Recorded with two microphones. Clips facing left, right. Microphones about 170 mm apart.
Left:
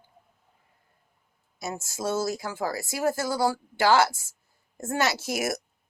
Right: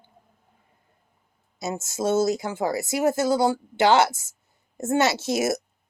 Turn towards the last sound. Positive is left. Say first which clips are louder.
# right 5 dB
turn(degrees=-25)  # may be behind; listen again after turning